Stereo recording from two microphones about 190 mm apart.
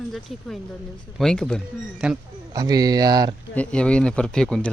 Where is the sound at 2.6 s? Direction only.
20° right (ahead or behind).